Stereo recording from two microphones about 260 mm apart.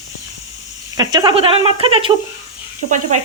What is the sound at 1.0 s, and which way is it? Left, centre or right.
Speech, centre.